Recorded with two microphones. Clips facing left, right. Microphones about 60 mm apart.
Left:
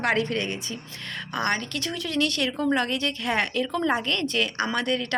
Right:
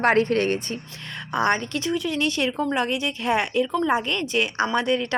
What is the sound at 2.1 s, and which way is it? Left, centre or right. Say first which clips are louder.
A woman's voice: right 2 dB; right.